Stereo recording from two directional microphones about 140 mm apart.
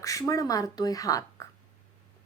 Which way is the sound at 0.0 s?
25° left (ahead or behind).